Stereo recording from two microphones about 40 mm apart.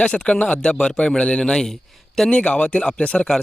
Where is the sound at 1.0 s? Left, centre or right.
Left.